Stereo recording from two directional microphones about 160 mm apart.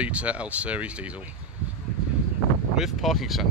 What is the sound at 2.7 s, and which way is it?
Speech, centre (ahead or behind).